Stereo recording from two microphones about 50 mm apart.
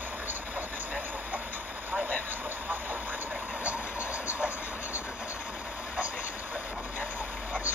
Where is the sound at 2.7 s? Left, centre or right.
Right.